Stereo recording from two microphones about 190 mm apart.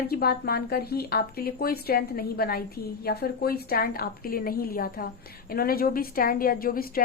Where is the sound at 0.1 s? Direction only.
55° left (ahead or behind).